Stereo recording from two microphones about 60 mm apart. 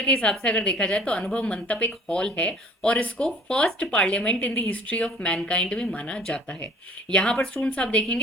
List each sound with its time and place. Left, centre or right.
0.0 s a woman's voice: centre
3.2 s a woman's voice: centre
7.6 s speech: centre